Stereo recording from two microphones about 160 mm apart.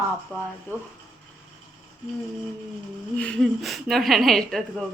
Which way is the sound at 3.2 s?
5° left (ahead or behind).